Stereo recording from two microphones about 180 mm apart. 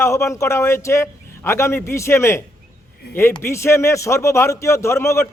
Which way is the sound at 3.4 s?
15° left (ahead or behind).